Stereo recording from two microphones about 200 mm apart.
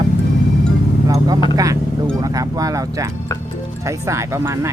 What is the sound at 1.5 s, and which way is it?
Speech, 15° right (ahead or behind).